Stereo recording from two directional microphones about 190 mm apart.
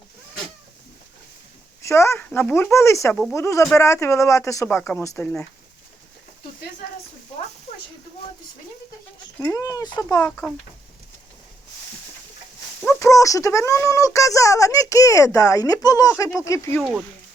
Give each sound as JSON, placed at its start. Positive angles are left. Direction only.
{"t": 1.8, "sound": "speech", "side_deg": 15}
{"t": 9.4, "sound": "speech", "side_deg": 15}
{"t": 10.2, "sound": "speech", "side_deg": 5}
{"t": 12.8, "sound": "speech", "side_deg": 15}